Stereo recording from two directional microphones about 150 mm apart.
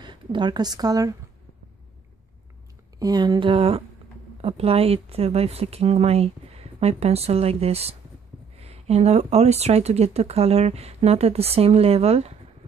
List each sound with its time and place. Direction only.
0.0 s speech: 30° right (ahead or behind)
3.0 s speech: 25° right (ahead or behind); by 12.4 s 45° right (ahead or behind)